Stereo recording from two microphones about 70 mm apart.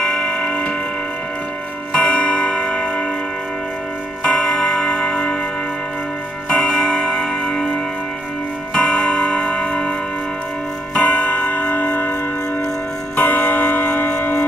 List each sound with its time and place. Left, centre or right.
0.0 s tick-tock: centre
2.0 s music: centre
4.2 s music: centre
6.5 s music: centre
8.7 s music: centre
11.0 s music: left
13.1 s clock: left